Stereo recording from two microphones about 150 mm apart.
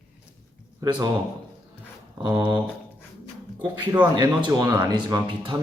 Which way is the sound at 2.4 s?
30° right (ahead or behind).